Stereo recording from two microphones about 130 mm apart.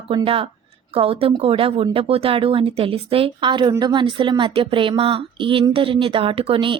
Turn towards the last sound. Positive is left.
turn(degrees=-40)  # may be behind; listen again after turning